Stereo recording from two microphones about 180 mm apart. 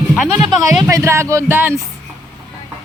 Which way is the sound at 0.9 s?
15° right (ahead or behind).